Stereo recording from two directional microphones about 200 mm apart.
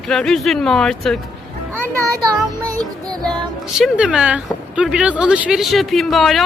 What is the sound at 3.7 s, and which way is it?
Speech, 5° right (ahead or behind).